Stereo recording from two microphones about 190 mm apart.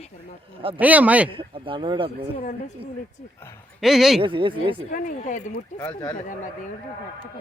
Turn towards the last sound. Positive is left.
turn(degrees=5)  # may be behind; listen again after turning